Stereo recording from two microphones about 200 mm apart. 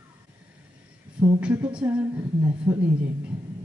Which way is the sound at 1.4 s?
5° right (ahead or behind).